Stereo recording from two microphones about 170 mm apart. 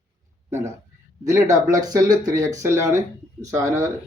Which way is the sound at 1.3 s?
20° right (ahead or behind).